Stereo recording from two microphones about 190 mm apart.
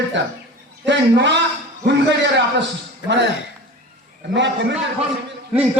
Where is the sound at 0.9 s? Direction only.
65° right (ahead or behind).